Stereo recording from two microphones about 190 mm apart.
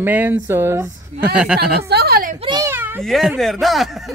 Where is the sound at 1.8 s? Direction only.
55° right (ahead or behind).